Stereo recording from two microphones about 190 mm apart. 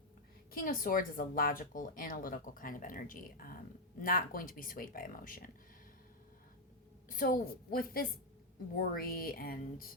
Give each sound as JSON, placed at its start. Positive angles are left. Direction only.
{"t": 0.5, "sound": "speech", "side_deg": 50}
{"t": 7.1, "sound": "speech", "side_deg": 45}